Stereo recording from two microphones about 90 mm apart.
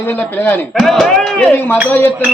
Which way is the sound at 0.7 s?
5° left (ahead or behind).